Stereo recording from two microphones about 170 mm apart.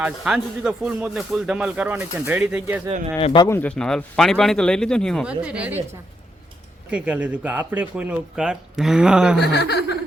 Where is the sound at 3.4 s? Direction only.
10° left (ahead or behind).